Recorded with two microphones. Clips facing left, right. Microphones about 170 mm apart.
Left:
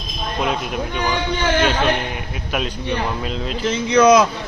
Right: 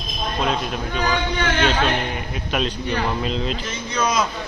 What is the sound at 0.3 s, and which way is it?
Speech, 15° left (ahead or behind).